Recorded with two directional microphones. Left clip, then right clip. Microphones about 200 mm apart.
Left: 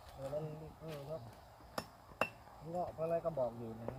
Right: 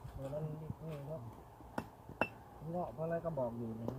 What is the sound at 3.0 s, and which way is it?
Speech, 5° left (ahead or behind).